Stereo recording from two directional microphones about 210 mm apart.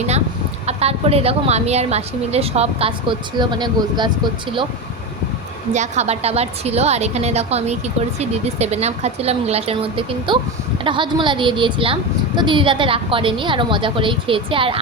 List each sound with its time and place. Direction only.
0.7 s a woman's voice: 30° right (ahead or behind)
5.7 s a woman's voice: 35° right (ahead or behind)